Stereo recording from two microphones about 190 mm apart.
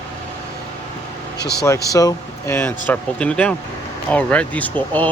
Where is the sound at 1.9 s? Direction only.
20° left (ahead or behind).